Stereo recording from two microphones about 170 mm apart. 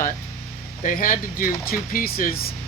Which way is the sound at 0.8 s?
50° left (ahead or behind).